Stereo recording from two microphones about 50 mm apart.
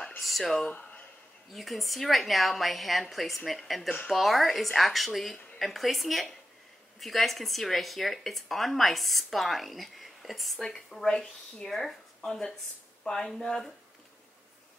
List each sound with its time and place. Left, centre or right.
0.2 s speech: centre
0.7 s a sound: left
1.5 s speech: centre